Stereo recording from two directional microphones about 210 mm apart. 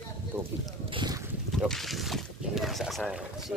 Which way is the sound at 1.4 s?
Centre (ahead or behind).